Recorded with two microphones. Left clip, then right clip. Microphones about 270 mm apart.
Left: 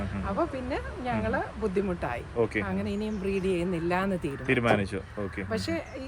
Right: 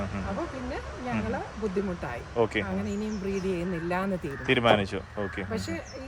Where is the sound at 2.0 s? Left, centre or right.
Centre.